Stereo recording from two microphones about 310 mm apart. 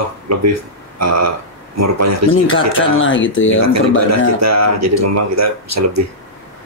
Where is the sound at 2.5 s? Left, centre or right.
Left.